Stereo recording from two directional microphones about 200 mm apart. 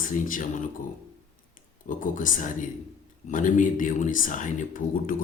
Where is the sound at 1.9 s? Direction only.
40° left (ahead or behind).